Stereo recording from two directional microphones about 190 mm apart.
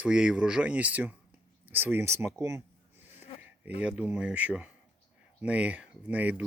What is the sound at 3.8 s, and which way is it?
Speech, 5° right (ahead or behind).